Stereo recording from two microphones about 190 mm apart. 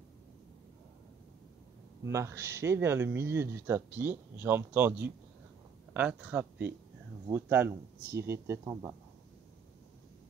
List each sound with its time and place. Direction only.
2.0 s speech: 15° right (ahead or behind)